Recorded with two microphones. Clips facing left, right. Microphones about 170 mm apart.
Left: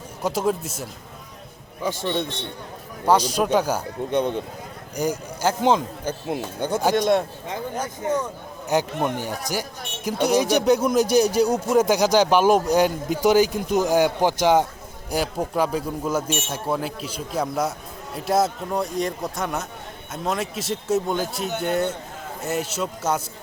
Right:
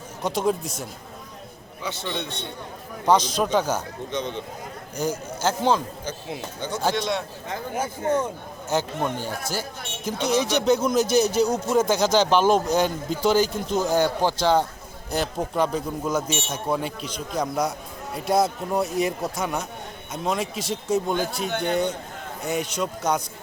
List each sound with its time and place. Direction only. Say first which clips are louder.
0.2 s a man's voice: left 1 dB; 5° left (ahead or behind)
1.8 s speech: left 6 dB; 45° left (ahead or behind)
3.1 s speech: left 1 dB; 10° left (ahead or behind)
4.1 s speech: left 7 dB; 55° left (ahead or behind)
4.9 s speech: left 2 dB; 10° left (ahead or behind)
6.1 s speech: left 8 dB; 55° left (ahead or behind)
8.7 s a man's voice: left 3 dB; 15° left (ahead or behind)